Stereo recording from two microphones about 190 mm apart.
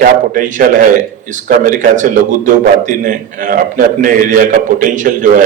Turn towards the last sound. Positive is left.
turn(degrees=-45)  # may be behind; listen again after turning